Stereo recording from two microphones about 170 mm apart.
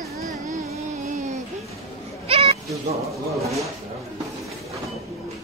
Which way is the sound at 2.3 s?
35° right (ahead or behind).